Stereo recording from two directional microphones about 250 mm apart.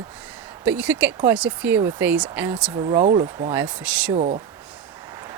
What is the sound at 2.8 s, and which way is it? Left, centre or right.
Speech, right.